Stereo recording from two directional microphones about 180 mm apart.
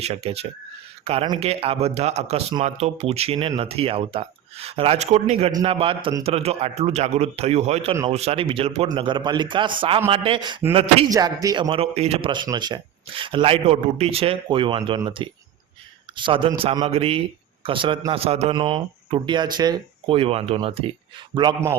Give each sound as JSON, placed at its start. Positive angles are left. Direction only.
{"t": 0.0, "sound": "a man's voice", "side_deg": -35}
{"t": 5.5, "sound": "a man's voice", "side_deg": -25}